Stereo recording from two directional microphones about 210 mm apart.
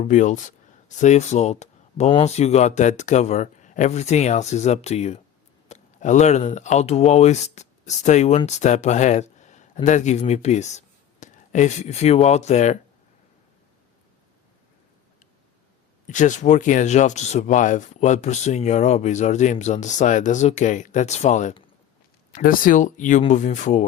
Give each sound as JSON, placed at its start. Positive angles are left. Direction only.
{"t": 0.0, "sound": "speech", "side_deg": 35}
{"t": 16.0, "sound": "speech", "side_deg": 35}